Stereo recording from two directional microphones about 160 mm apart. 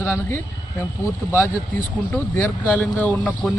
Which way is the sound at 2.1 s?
10° left (ahead or behind).